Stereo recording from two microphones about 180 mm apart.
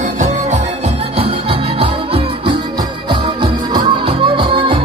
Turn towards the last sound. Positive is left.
turn(degrees=-30)  # may be behind; listen again after turning